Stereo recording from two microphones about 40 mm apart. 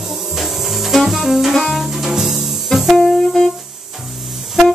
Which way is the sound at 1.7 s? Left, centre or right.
Centre.